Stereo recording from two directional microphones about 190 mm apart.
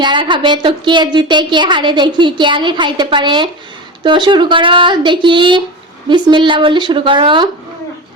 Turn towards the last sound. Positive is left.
turn(degrees=-25)  # may be behind; listen again after turning